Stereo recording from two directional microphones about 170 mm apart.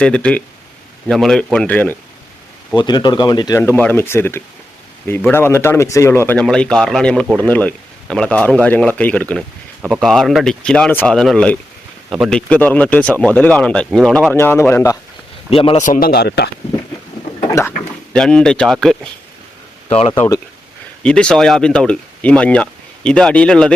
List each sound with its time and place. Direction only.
0.0 s speech: 5° left (ahead or behind)
2.7 s speech: 25° left (ahead or behind); by 14.3 s centre (ahead or behind)
14.3 s speech: 15° left (ahead or behind)
15.4 s a man's voice: 35° left (ahead or behind)
15.8 s speech: 55° left (ahead or behind); by 16.5 s 70° left (ahead or behind)
17.5 s speech: 15° left (ahead or behind)
20.0 s a man's voice: 35° left (ahead or behind)
21.0 s speech: 5° left (ahead or behind)